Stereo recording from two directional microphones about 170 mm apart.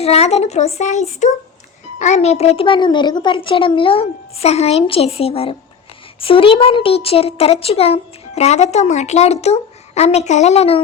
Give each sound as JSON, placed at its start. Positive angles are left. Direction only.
{"t": 0.0, "sound": "speech", "side_deg": 40}